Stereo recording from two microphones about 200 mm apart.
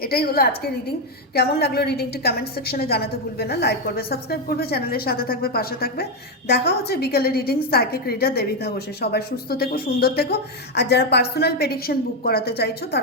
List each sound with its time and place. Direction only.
0.0 s a woman's voice: 50° left (ahead or behind)